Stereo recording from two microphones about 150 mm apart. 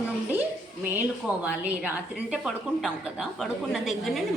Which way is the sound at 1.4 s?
10° right (ahead or behind).